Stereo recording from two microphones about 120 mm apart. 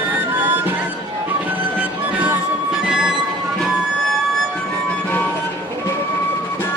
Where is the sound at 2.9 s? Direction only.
5° right (ahead or behind).